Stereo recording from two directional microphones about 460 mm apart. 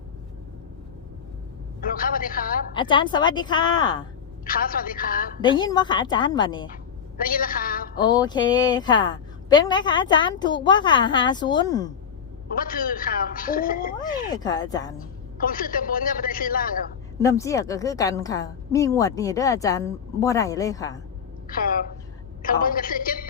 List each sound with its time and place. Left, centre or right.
1.8 s a woman's voice: centre
15.4 s a man's voice: centre
17.2 s a woman's voice: centre
21.5 s a woman's voice: centre